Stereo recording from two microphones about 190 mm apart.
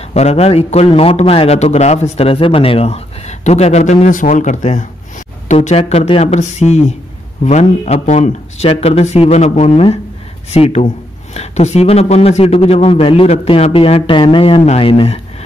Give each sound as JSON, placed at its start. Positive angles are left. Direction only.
{"t": 0.1, "sound": "a man's voice", "side_deg": 35}